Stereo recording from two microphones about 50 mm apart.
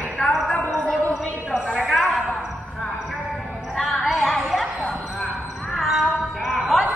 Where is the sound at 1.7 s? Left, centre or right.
Centre.